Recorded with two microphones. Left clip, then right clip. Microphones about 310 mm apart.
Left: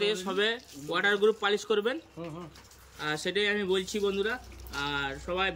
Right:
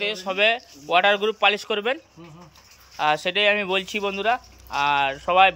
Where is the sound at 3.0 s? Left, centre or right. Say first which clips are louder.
Right 9 dB; centre.